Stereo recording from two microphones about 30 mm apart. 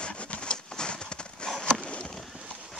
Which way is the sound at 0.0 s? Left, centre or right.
Left.